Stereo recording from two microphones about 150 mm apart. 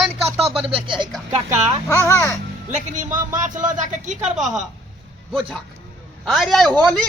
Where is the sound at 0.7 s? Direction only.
35° right (ahead or behind).